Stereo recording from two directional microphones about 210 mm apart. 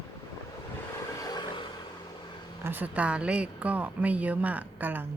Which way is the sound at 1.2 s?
20° left (ahead or behind).